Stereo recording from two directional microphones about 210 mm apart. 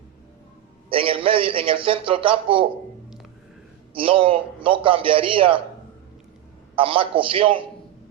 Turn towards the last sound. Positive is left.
turn(degrees=-25)  # may be behind; listen again after turning